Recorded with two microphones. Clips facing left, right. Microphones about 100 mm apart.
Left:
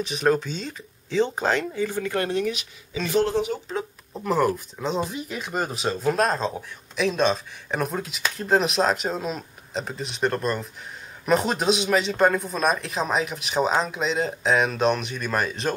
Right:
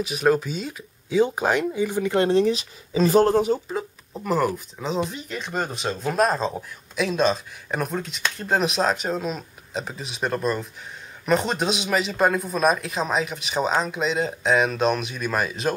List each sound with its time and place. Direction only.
0.0 s speech: 5° right (ahead or behind)
2.2 s speech: 30° right (ahead or behind)
3.6 s speech: centre (ahead or behind)